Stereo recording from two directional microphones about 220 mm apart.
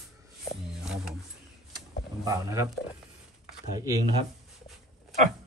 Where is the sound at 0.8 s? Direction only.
5° right (ahead or behind).